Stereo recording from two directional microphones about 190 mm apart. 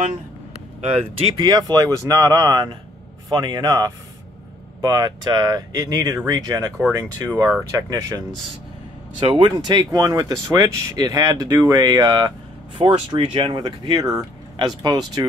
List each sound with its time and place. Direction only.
0.8 s speech: 25° right (ahead or behind)
9.2 s speech: 25° right (ahead or behind)